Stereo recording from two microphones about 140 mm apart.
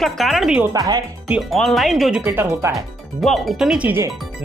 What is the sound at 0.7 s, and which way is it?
Speech, 25° right (ahead or behind).